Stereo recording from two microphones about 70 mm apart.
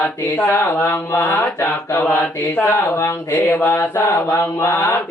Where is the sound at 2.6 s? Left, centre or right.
Left.